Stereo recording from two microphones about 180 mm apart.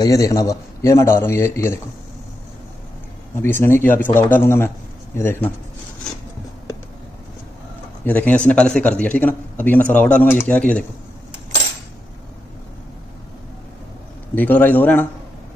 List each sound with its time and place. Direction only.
0.0 s speech: 20° left (ahead or behind)
3.4 s speech: 10° left (ahead or behind)
8.0 s speech: 10° left (ahead or behind)
14.3 s speech: 10° left (ahead or behind)